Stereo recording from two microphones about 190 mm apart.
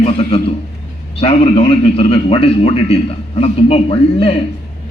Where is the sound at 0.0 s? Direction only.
30° left (ahead or behind).